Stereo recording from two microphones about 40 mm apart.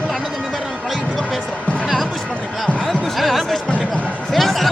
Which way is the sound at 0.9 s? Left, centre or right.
Centre.